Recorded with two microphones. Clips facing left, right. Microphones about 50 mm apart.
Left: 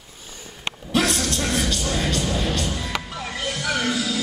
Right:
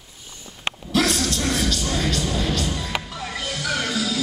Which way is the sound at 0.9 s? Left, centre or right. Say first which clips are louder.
Even; centre.